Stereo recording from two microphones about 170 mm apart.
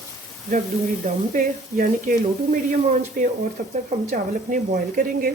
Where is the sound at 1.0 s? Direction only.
50° right (ahead or behind).